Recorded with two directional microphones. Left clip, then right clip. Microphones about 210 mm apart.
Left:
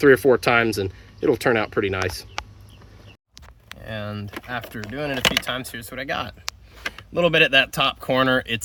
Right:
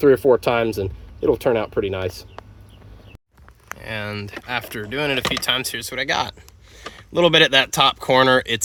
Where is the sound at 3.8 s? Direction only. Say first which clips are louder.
Right 4 dB; 40° right (ahead or behind).